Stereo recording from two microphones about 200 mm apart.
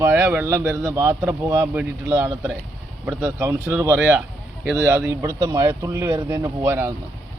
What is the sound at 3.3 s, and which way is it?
Speech, 10° right (ahead or behind).